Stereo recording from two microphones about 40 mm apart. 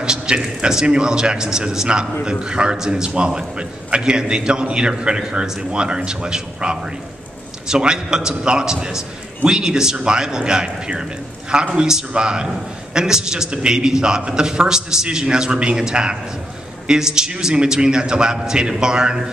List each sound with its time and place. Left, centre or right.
0.0 s a man's voice: right